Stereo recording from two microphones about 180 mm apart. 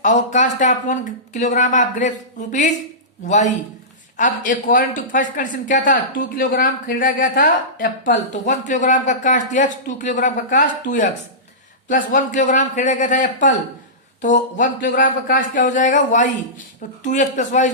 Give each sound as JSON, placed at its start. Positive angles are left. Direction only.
{"t": 0.0, "sound": "speech", "side_deg": 40}